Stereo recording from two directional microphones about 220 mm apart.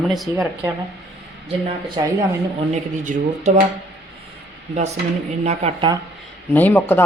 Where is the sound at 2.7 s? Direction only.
30° right (ahead or behind).